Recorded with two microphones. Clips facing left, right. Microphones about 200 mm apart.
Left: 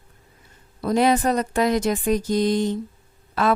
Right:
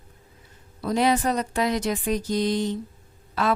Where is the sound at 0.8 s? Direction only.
50° left (ahead or behind).